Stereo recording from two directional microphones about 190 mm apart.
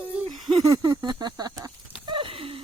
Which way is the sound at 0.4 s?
20° right (ahead or behind).